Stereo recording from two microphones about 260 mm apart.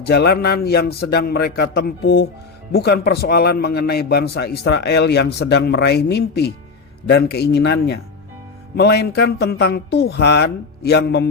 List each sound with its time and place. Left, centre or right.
0.1 s a man's voice: left